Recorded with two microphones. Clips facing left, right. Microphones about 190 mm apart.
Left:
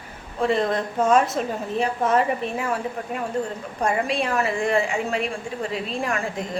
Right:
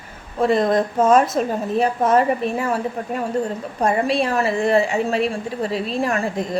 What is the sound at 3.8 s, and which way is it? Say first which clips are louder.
A woman's voice: right 4 dB; 35° right (ahead or behind).